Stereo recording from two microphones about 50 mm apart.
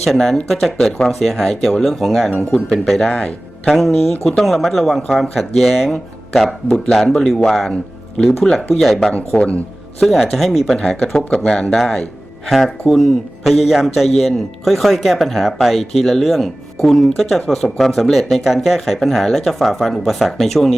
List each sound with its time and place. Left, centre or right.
0.0 s a man's voice: centre
3.1 s a man's voice: centre
3.7 s a man's voice: centre
6.7 s a man's voice: centre
10.8 s a man's voice: centre